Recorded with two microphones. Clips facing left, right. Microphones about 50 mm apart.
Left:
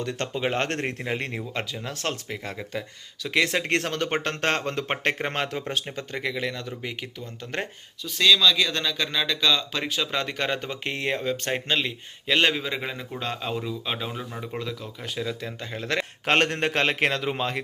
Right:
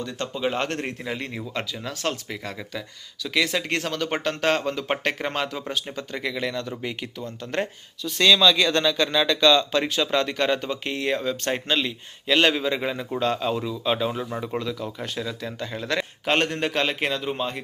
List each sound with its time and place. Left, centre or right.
0.0 s speech: left
0.3 s speech: left
2.3 s speech: left
4.2 s a man's voice: left
5.0 s speech: left
6.1 s speech: centre
8.3 s speech: centre
16.2 s a man's voice: left